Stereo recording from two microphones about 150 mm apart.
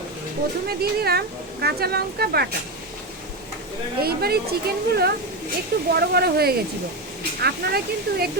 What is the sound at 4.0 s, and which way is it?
Speech, 90° right.